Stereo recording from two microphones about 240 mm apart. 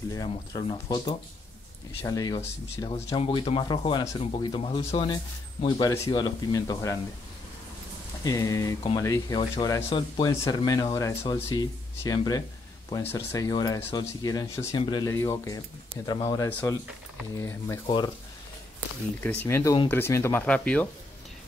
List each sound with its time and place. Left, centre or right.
0.1 s speech: centre
8.2 s speech: centre
19.4 s speech: centre